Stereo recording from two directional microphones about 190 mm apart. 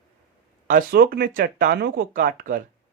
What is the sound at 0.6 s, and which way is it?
Speech, 50° right (ahead or behind).